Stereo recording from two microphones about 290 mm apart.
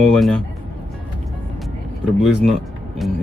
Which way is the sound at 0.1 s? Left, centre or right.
Centre.